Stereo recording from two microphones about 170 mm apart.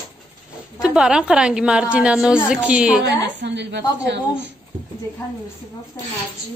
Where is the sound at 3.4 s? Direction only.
90° right.